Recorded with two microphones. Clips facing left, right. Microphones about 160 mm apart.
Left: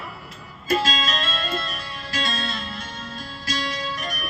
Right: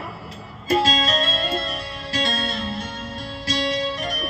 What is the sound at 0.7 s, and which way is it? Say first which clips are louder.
Music: right 3 dB; 30° right (ahead or behind).